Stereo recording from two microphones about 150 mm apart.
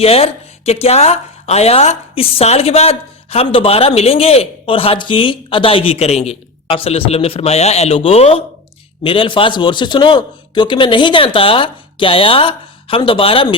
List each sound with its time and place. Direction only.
0.0 s speech: 40° left (ahead or behind)